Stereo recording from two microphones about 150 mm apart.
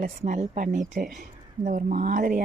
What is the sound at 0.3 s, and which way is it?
Speech, 60° right (ahead or behind).